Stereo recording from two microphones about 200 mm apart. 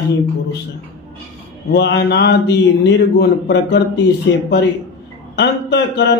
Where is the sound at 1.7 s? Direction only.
60° left (ahead or behind).